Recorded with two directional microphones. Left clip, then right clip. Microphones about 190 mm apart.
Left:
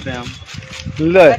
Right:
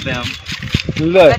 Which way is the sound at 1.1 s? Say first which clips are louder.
Even; centre (ahead or behind).